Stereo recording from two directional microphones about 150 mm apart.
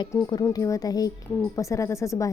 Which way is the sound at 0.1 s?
25° left (ahead or behind).